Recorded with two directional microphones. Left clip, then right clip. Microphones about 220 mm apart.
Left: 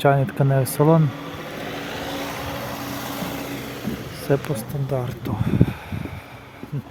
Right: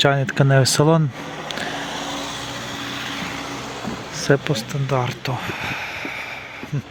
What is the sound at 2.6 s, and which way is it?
Vehicle, 55° left (ahead or behind).